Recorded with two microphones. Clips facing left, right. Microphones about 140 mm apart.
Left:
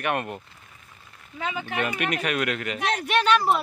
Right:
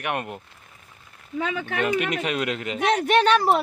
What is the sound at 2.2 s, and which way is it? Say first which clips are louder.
Speech: even; 25° right (ahead or behind).